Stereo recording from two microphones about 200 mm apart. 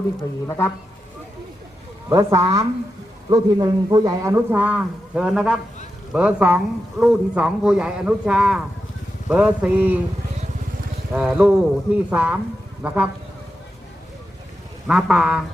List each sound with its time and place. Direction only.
0.2 s speech: 15° left (ahead or behind)
2.0 s a man's voice: 15° right (ahead or behind)
11.1 s a man's voice: 5° right (ahead or behind)
14.8 s speech: centre (ahead or behind)